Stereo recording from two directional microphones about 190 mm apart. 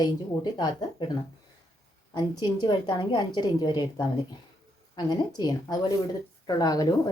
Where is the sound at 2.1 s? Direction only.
25° left (ahead or behind).